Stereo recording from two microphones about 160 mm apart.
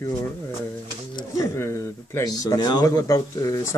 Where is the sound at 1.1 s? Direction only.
20° left (ahead or behind).